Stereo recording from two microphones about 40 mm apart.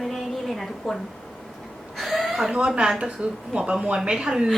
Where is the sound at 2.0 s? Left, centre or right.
Centre.